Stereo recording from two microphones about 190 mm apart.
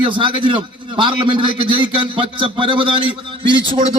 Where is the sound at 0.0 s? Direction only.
25° right (ahead or behind).